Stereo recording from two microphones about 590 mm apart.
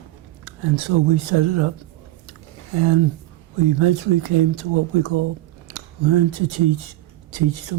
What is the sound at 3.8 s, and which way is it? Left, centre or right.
Speech, right.